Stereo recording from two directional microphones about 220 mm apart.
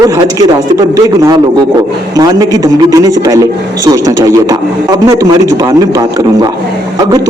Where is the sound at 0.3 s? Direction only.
15° right (ahead or behind).